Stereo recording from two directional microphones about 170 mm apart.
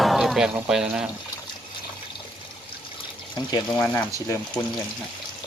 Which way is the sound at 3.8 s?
15° left (ahead or behind).